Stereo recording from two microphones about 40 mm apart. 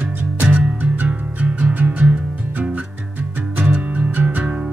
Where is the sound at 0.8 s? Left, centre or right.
Right.